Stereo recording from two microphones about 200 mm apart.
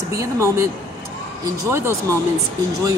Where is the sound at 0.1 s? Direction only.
15° right (ahead or behind).